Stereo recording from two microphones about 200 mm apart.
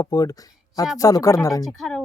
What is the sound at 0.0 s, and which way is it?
Speech, 20° left (ahead or behind).